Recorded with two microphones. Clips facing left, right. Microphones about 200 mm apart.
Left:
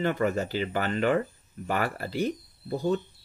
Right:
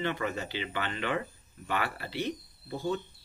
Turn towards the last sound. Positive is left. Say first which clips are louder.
# left 5 dB
turn(degrees=40)  # may be behind; listen again after turning